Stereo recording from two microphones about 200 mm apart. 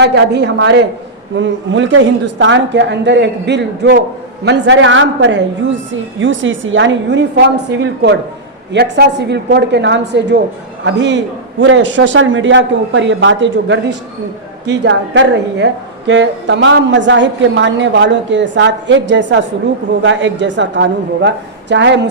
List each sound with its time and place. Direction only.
0.0 s a woman's voice: 60° right (ahead or behind)
1.4 s a woman's voice: 70° right (ahead or behind)